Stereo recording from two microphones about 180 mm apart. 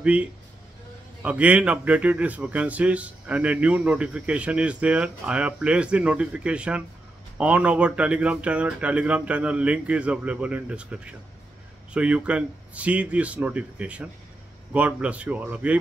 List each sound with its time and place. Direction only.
0.0 s speech: 5° right (ahead or behind)